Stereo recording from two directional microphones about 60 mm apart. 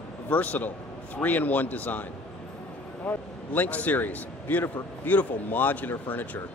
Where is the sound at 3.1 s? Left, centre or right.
Left.